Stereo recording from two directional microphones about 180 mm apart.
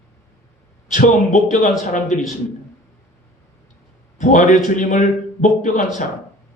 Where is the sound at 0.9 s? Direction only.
45° left (ahead or behind).